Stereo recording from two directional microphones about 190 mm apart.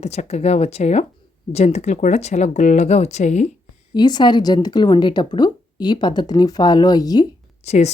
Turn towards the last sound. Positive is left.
turn(degrees=35)  # may be behind; listen again after turning